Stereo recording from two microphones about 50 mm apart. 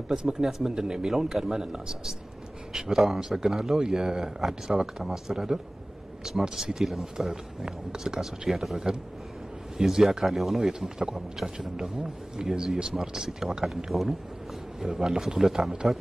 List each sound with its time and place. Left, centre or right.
0.1 s speech: centre
10.7 s speech: centre